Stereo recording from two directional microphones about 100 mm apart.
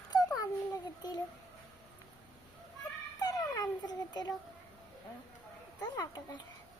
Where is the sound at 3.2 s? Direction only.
40° left (ahead or behind).